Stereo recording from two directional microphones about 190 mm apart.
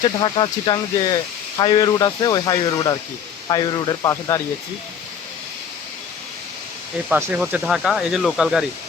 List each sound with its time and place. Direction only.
0.0 s speech: 25° left (ahead or behind)
7.1 s speech: 10° right (ahead or behind)